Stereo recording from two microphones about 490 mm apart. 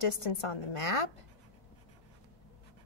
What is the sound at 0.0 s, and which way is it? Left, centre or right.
A woman's voice, left.